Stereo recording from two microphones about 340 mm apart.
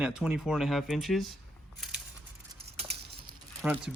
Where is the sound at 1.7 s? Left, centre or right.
Centre.